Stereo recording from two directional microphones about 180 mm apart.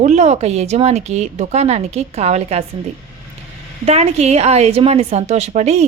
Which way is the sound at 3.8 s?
35° right (ahead or behind).